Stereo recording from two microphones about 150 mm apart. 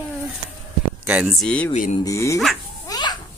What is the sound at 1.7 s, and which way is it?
Speech, 50° left (ahead or behind).